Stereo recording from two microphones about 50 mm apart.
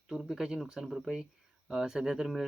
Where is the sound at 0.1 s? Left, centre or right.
Centre.